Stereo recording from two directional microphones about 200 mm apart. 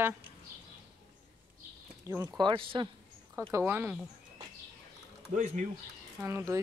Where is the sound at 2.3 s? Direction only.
25° right (ahead or behind).